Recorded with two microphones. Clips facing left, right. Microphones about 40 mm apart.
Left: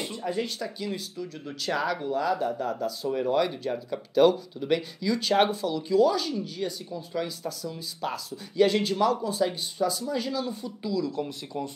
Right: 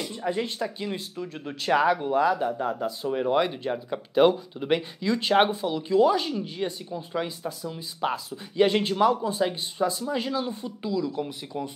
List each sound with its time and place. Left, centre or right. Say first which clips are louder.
0.1 s speech: right 2 dB; right